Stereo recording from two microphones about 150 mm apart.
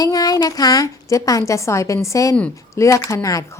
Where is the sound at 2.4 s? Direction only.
10° left (ahead or behind).